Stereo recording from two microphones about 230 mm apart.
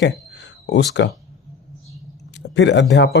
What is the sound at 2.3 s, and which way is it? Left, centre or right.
Speech, left.